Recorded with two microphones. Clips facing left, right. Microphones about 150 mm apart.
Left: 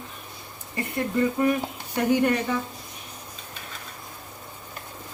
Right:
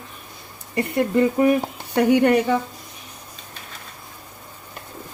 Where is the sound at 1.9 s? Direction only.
70° right (ahead or behind).